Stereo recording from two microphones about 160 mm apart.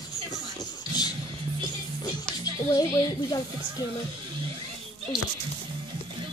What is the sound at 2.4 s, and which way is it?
A child's voice, 20° left (ahead or behind).